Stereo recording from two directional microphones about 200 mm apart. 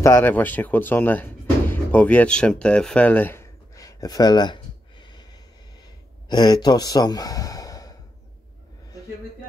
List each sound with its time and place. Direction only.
0.0 s speech: 10° left (ahead or behind)
6.2 s speech: 20° left (ahead or behind)